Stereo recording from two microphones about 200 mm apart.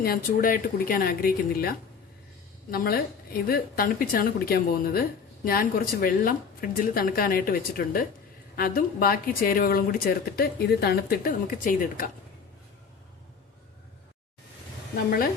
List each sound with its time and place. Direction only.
0.0 s speech: 45° left (ahead or behind)
14.9 s speech: 45° left (ahead or behind)